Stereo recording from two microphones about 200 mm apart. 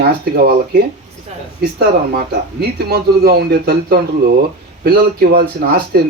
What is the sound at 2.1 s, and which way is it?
Speech, 50° right (ahead or behind).